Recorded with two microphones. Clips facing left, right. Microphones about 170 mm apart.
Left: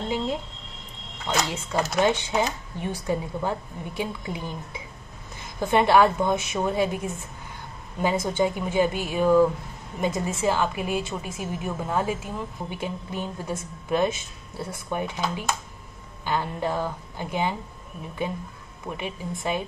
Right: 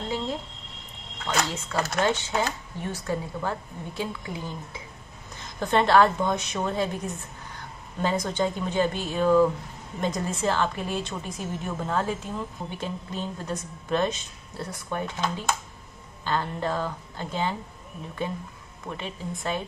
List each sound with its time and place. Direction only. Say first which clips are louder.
1.2 s a woman's voice: left 1 dB; 15° left (ahead or behind)
18.9 s a woman's voice: left 2 dB; 15° left (ahead or behind)